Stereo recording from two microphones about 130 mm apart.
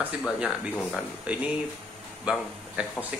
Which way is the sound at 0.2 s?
Centre (ahead or behind).